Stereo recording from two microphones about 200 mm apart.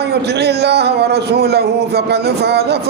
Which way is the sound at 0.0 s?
55° right (ahead or behind).